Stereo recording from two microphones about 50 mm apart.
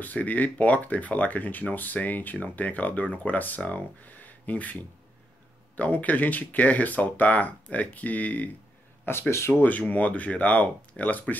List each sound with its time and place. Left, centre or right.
0.0 s speech: left
9.1 s speech: left
9.5 s speech: left